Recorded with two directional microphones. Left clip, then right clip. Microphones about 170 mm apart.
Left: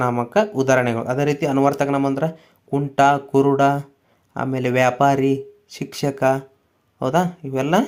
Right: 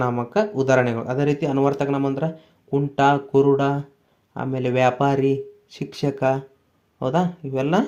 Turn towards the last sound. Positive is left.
turn(degrees=15)  # may be behind; listen again after turning